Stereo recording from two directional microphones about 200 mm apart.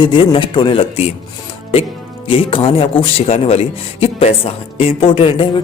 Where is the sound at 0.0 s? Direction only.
25° left (ahead or behind).